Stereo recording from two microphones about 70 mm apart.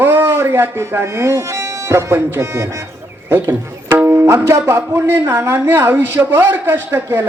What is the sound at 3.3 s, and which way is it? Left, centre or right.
Speech, right.